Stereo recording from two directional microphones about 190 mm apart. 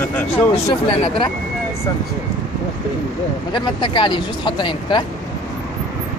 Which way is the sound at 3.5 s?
25° left (ahead or behind).